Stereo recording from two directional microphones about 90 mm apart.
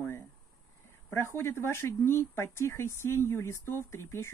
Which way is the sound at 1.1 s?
30° left (ahead or behind).